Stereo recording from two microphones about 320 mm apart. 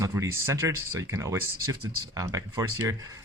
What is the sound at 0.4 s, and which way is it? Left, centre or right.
Speech, centre.